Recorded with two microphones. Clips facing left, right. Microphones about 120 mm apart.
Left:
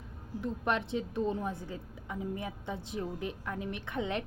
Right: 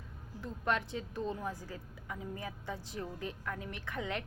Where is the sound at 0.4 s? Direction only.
20° left (ahead or behind).